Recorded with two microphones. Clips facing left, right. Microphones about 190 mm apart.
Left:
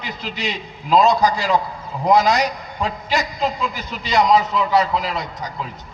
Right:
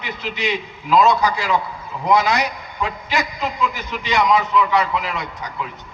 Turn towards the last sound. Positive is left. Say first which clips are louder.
# left 1 dB
turn(degrees=35)  # may be behind; listen again after turning